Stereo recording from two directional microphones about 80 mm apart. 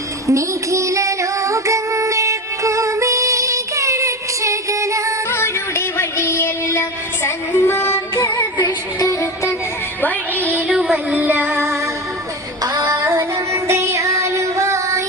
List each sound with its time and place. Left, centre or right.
0.3 s female singing: right
5.3 s music: left
8.6 s music: left
10.7 s music: centre
11.1 s music: right
12.8 s music: right